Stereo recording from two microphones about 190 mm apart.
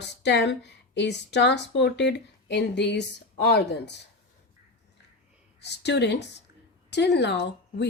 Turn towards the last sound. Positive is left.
turn(degrees=65)  # may be behind; listen again after turning